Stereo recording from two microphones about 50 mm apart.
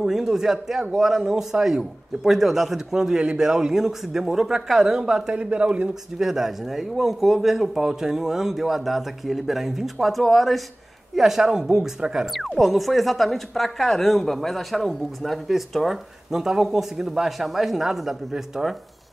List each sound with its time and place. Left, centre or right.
0.0 s speech: centre; by 5.9 s right
6.1 s speech: centre
11.1 s speech: centre
12.3 s speech: centre